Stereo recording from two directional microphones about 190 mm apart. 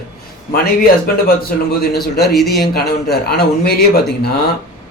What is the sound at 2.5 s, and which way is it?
Speech, 55° left (ahead or behind).